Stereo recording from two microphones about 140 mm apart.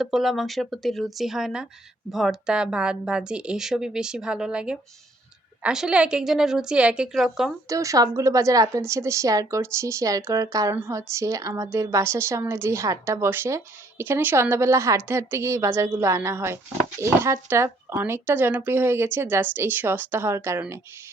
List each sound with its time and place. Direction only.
0.0 s speech: centre (ahead or behind)
7.7 s a woman's voice: 25° right (ahead or behind)